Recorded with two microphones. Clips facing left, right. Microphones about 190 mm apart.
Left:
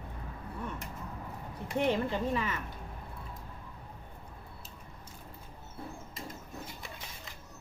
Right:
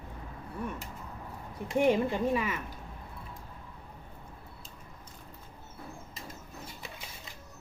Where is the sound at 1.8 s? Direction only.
10° right (ahead or behind).